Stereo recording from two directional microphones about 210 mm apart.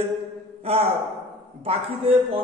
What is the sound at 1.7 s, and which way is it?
Speech, 30° right (ahead or behind).